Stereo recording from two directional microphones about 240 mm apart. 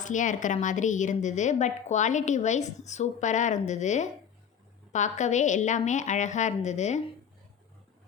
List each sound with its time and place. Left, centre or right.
0.0 s a woman's voice: left